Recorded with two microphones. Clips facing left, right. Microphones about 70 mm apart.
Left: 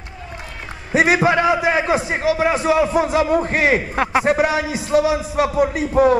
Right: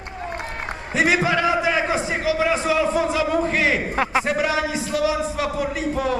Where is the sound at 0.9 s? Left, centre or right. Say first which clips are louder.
Left 4 dB; left.